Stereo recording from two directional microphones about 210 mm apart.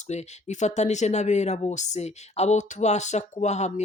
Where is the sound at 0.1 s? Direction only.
35° left (ahead or behind).